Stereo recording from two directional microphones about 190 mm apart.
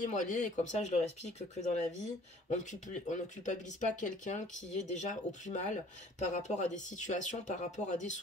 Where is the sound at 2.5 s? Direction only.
40° left (ahead or behind).